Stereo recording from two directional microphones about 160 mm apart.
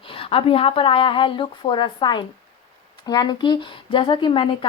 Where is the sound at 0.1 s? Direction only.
35° left (ahead or behind).